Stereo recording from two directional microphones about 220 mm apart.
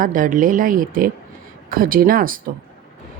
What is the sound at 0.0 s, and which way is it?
A woman's voice, 40° right (ahead or behind).